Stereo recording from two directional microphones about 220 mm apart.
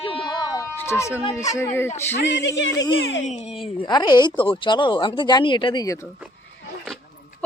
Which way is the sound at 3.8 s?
20° left (ahead or behind).